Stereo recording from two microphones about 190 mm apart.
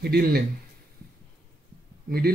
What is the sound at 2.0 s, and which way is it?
Speech, 55° right (ahead or behind).